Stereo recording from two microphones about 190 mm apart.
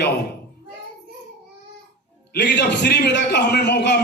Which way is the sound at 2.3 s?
65° left (ahead or behind).